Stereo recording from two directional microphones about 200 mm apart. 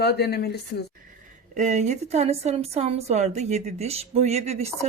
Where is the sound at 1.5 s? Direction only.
35° right (ahead or behind).